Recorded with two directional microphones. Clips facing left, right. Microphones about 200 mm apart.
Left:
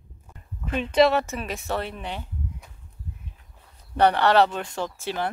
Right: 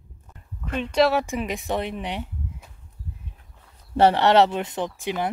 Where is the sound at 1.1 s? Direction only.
15° right (ahead or behind).